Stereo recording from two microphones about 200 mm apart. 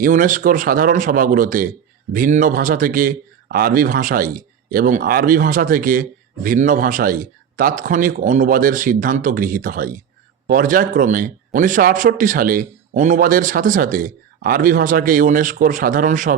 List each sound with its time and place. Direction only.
0.0 s speech: 45° right (ahead or behind)